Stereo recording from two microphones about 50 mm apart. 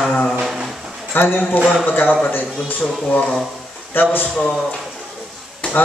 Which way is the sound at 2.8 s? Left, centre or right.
Left.